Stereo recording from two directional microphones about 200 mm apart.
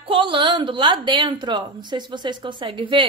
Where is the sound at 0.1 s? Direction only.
25° right (ahead or behind).